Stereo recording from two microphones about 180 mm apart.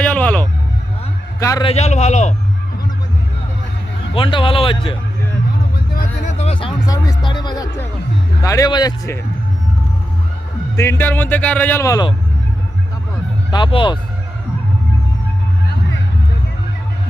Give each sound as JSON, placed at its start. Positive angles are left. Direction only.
{"t": 0.0, "sound": "vehicle", "side_deg": 5}
{"t": 1.4, "sound": "a man's voice", "side_deg": 15}
{"t": 1.6, "sound": "a man's voice", "side_deg": 35}
{"t": 4.1, "sound": "speech", "side_deg": 30}
{"t": 5.9, "sound": "music", "side_deg": 45}
{"t": 8.4, "sound": "speech", "side_deg": 20}
{"t": 10.8, "sound": "speech", "side_deg": 10}
{"t": 13.5, "sound": "speech", "side_deg": 30}